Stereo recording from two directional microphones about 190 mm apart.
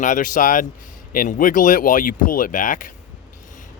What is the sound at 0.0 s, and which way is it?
Speech, 45° left (ahead or behind).